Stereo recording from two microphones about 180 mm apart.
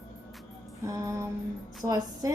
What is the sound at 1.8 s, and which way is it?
Speech, 20° right (ahead or behind).